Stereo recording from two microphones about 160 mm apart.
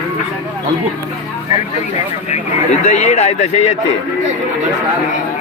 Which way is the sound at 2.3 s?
45° left (ahead or behind).